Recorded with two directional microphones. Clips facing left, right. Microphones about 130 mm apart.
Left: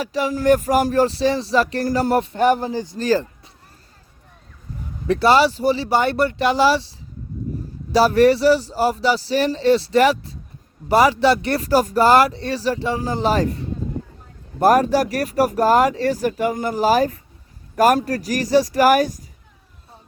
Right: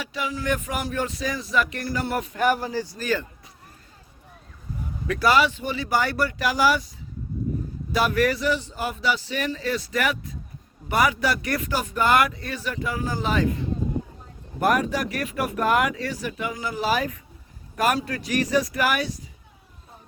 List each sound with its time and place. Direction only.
0.0 s speech: 40° left (ahead or behind); by 3.0 s 20° left (ahead or behind)
3.0 s speech: 35° left (ahead or behind)
5.0 s speech: 30° left (ahead or behind)
7.9 s speech: 30° left (ahead or behind)
14.6 s speech: 35° left (ahead or behind)